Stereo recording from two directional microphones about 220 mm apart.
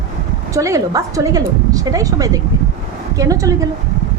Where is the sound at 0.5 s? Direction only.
15° right (ahead or behind).